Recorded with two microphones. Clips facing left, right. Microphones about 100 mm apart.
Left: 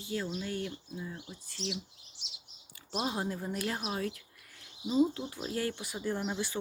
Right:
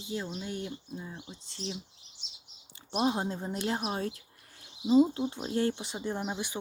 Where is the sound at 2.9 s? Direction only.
25° right (ahead or behind).